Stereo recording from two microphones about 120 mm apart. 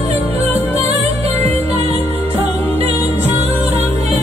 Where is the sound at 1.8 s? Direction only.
60° right (ahead or behind).